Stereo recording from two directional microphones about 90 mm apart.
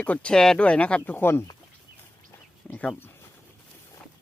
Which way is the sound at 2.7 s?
15° left (ahead or behind).